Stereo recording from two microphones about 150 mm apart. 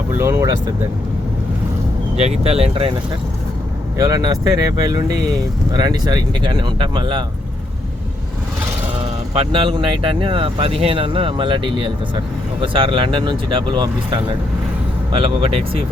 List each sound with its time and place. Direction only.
0.1 s speech: 15° right (ahead or behind)
2.1 s speech: 45° right (ahead or behind)
3.9 s speech: 25° right (ahead or behind)
9.3 s speech: 40° right (ahead or behind)